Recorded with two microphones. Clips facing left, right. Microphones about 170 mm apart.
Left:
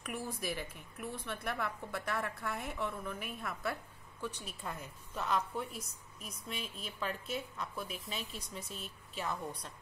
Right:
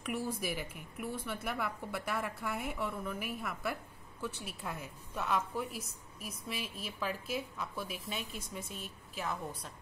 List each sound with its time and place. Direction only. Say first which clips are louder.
0.0 s a woman's voice: right 3 dB; 10° right (ahead or behind)